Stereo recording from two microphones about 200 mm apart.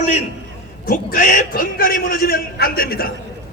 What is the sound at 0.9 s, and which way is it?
A man's voice, 45° left (ahead or behind).